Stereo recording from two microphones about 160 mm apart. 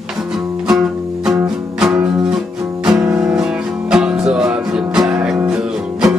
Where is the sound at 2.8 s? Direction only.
5° right (ahead or behind).